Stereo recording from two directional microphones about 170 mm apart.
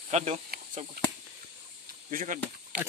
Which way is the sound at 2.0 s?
50° right (ahead or behind).